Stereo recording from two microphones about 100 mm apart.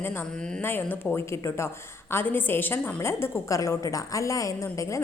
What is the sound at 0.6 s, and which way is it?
A woman's voice, 20° left (ahead or behind).